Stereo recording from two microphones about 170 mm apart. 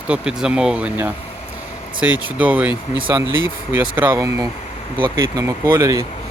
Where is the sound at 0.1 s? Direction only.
5° right (ahead or behind).